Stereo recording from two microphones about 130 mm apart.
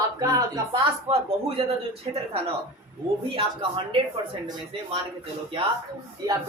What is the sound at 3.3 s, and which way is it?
Speech, 45° right (ahead or behind).